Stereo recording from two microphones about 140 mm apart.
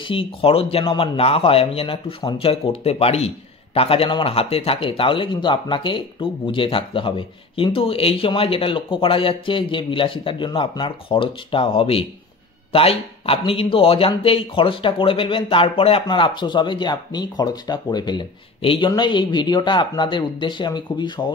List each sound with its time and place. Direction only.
0.0 s speech: 40° left (ahead or behind)